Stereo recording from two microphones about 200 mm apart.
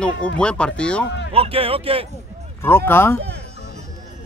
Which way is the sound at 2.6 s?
10° left (ahead or behind).